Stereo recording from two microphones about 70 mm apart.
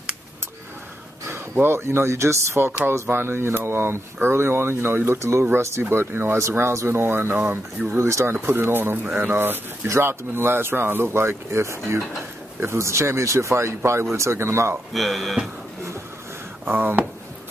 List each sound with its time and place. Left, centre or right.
1.6 s speech: right
8.0 s speech: right
8.4 s speech: right
15.0 s speech: centre
16.7 s speech: right